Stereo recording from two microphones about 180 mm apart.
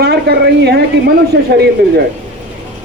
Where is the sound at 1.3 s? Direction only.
75° right (ahead or behind).